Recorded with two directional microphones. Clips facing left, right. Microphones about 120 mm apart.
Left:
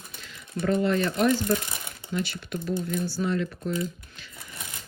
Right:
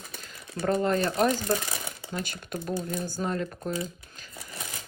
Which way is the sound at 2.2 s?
45° right (ahead or behind).